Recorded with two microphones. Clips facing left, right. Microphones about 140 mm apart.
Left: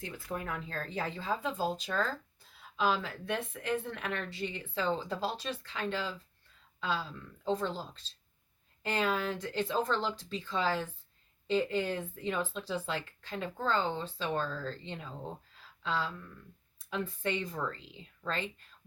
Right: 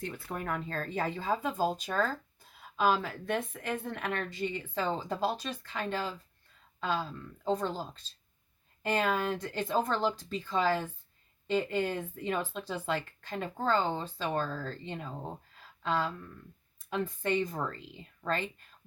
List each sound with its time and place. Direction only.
0.3 s speech: 50° right (ahead or behind)
8.8 s speech: 50° right (ahead or behind)